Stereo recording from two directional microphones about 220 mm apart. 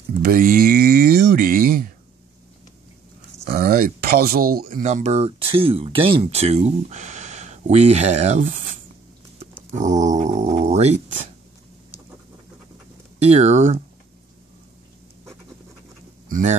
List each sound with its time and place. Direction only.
0.2 s a sound: 40° right (ahead or behind)
3.4 s speech: 45° right (ahead or behind)
13.2 s speech: 30° right (ahead or behind)
16.3 s speech: 35° right (ahead or behind)